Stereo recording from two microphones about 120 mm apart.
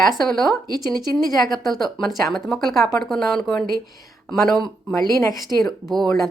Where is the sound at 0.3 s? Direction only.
Centre (ahead or behind).